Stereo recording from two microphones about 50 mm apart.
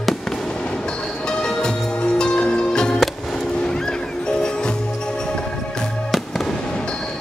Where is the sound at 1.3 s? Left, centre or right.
Centre.